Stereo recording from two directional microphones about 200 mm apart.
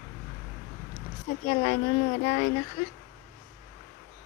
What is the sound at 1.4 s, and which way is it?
Speech, 50° left (ahead or behind).